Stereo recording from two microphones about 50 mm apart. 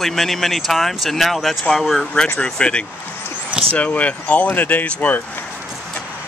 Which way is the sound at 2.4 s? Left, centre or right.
Left.